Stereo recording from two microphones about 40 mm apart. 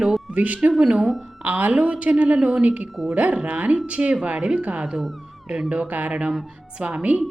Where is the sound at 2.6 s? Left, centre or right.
Right.